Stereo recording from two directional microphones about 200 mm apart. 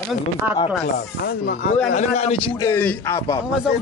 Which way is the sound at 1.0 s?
55° left (ahead or behind).